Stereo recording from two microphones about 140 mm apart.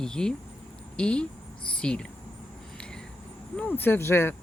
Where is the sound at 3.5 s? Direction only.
10° left (ahead or behind).